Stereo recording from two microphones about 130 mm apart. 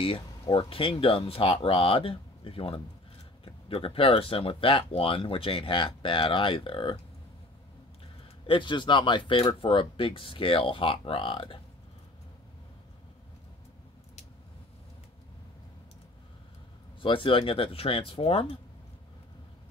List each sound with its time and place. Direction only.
0.5 s speech: 45° left (ahead or behind)
8.5 s speech: 40° left (ahead or behind)
17.0 s speech: 40° left (ahead or behind)